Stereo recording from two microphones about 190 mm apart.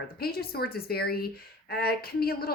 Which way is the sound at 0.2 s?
55° left (ahead or behind).